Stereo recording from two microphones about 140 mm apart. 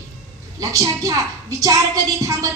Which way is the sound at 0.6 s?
25° right (ahead or behind).